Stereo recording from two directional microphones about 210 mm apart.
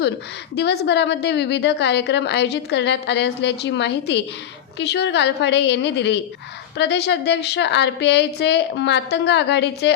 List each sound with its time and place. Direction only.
0.5 s a woman's voice: 50° left (ahead or behind)